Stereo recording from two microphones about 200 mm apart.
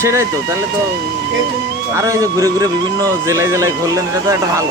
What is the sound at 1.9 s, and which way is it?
Speech, 15° right (ahead or behind).